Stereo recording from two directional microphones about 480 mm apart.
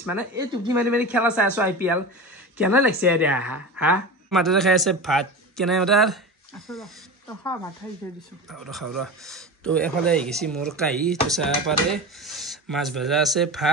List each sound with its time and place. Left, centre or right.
0.0 s a woman's voice: centre
8.8 s speech: right
9.2 s speech: centre